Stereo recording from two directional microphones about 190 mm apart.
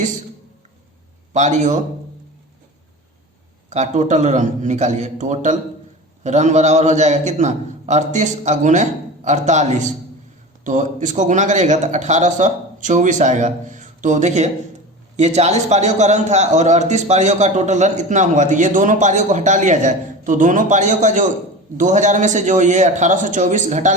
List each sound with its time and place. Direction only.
1.3 s a man's voice: 40° right (ahead or behind)
3.7 s a man's voice: 35° right (ahead or behind)